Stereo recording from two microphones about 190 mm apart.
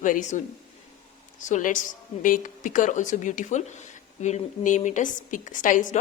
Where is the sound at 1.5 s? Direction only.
45° left (ahead or behind).